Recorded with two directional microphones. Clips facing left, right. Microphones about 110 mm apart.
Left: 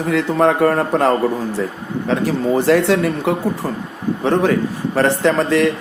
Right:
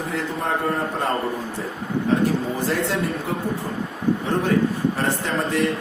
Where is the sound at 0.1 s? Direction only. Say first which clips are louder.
Left 11 dB; 90° left.